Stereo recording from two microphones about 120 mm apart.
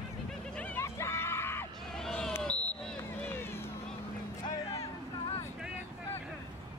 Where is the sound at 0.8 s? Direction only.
20° left (ahead or behind).